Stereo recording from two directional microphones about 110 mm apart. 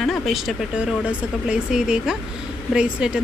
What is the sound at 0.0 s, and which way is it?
Speech, centre (ahead or behind).